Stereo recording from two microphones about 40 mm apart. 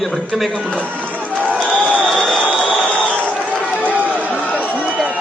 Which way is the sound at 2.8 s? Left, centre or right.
Left.